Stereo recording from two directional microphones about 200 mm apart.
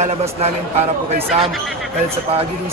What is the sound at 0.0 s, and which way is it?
Speech, 30° right (ahead or behind).